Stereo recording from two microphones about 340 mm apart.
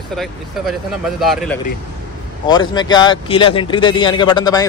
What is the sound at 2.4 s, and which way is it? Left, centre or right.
A man's voice, centre.